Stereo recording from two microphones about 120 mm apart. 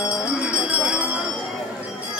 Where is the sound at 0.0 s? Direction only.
25° left (ahead or behind).